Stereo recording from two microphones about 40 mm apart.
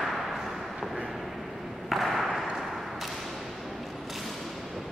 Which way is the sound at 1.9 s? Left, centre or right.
Centre.